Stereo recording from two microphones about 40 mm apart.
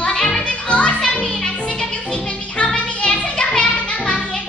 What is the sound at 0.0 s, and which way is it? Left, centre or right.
Music, centre.